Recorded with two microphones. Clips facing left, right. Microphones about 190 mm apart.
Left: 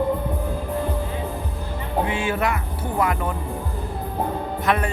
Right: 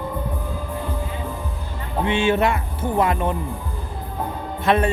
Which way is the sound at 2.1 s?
25° right (ahead or behind).